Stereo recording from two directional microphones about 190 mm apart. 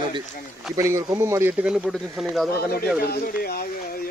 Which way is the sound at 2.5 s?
55° left (ahead or behind).